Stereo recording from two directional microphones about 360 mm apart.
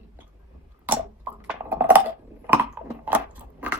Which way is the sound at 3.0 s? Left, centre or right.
Centre.